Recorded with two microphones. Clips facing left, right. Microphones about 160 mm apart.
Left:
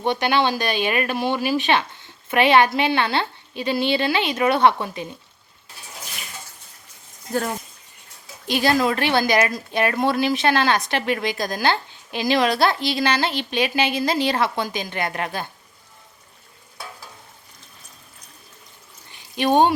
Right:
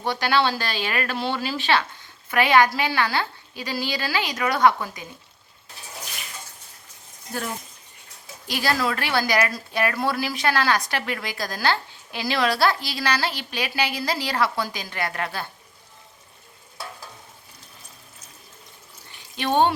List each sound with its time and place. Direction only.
0.0 s a woman's voice: 20° left (ahead or behind)
8.4 s a woman's voice: 20° left (ahead or behind)
19.4 s speech: 15° left (ahead or behind)